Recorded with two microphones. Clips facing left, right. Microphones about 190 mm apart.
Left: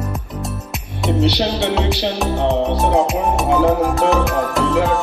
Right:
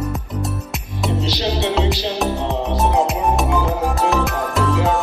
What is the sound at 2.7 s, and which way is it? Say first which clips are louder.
Music: left 2 dB; centre (ahead or behind).